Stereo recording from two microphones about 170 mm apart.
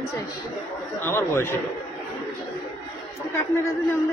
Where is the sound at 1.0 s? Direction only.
15° left (ahead or behind).